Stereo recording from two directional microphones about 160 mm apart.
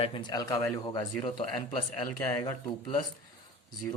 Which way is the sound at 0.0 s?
30° left (ahead or behind).